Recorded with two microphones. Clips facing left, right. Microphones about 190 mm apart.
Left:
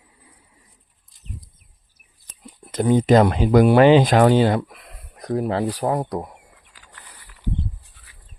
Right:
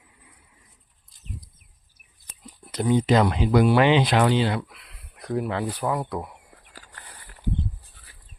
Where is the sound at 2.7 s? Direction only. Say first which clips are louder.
Left 5 dB; 50° left (ahead or behind).